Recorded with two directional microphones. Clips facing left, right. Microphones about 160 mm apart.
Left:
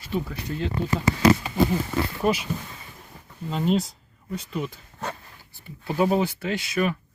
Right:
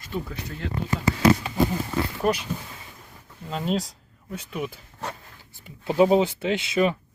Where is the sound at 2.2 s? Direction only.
5° left (ahead or behind).